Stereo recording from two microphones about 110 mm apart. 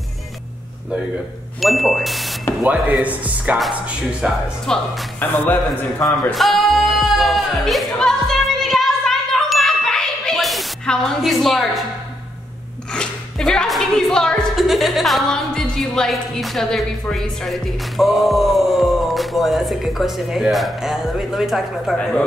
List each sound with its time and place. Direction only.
1.6 s speech: centre (ahead or behind)
2.6 s speech: 10° right (ahead or behind)
4.7 s speech: 5° left (ahead or behind)
5.4 s a man's voice: 15° left (ahead or behind)
6.3 s music: centre (ahead or behind)
12.9 s speech: 5° left (ahead or behind)